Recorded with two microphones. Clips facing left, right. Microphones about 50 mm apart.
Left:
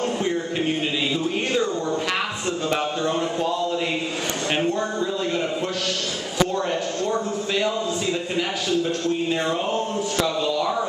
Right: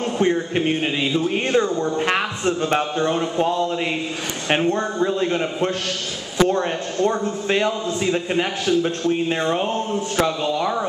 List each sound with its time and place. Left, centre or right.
0.2 s a man's voice: right